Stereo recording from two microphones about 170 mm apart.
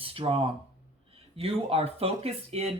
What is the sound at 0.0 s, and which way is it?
Speech, 30° right (ahead or behind).